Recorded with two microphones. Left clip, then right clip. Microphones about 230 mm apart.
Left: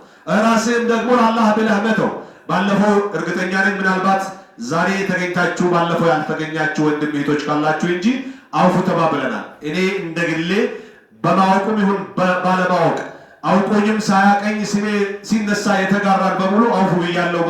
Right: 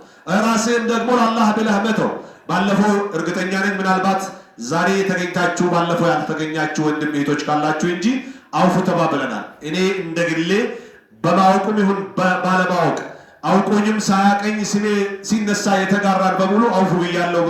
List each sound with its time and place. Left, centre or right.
0.3 s speech: right